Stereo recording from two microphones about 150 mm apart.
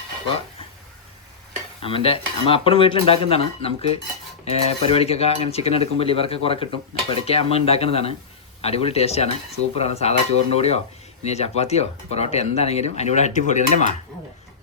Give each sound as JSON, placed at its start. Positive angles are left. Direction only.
{"t": 1.8, "sound": "speech", "side_deg": 40}